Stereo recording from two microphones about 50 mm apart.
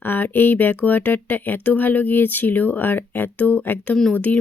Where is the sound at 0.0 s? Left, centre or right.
Left.